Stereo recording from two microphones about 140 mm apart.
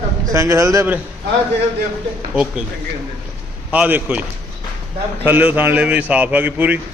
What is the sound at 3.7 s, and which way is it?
Speech, 10° right (ahead or behind).